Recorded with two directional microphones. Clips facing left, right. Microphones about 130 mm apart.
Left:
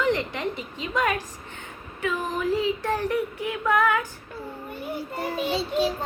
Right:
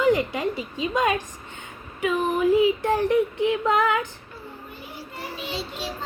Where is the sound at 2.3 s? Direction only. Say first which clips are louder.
Right 7 dB; 15° right (ahead or behind).